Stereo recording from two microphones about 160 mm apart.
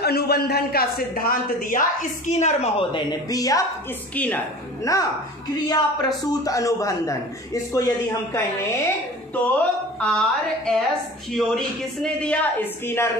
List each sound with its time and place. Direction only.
0.0 s a man's voice: 80° left; by 3.6 s 20° left (ahead or behind)
4.1 s a woman's voice: 10° left (ahead or behind)
4.9 s a woman's voice: 20° left (ahead or behind)